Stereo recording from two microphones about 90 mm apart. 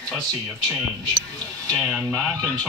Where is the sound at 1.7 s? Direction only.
10° left (ahead or behind).